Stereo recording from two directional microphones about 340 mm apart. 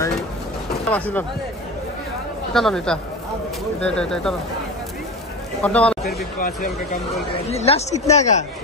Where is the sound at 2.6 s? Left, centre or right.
Centre.